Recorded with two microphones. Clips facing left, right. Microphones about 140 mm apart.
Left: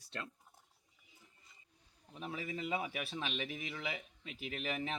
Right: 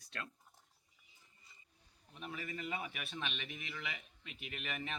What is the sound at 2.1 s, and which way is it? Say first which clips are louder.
Speech: left 3 dB; 30° left (ahead or behind).